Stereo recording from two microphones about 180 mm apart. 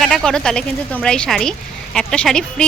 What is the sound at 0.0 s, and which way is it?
Speech, centre (ahead or behind).